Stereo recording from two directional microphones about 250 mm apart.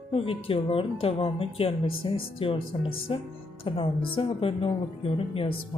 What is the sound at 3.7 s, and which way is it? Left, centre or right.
Speech, left.